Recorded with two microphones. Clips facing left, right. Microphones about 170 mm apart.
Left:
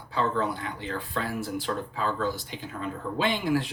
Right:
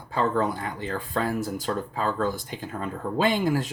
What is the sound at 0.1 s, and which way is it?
Speech, 45° right (ahead or behind).